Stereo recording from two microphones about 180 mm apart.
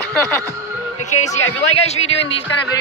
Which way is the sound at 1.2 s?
40° left (ahead or behind).